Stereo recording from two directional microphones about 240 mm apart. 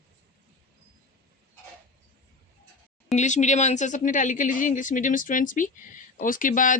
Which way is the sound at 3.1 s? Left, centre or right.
Left.